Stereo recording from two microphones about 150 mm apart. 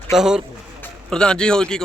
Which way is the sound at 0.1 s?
5° right (ahead or behind).